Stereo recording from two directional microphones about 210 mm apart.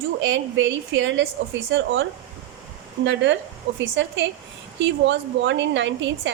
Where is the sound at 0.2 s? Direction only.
60° right (ahead or behind).